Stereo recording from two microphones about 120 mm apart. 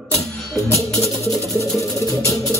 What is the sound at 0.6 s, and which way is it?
Music, 25° left (ahead or behind).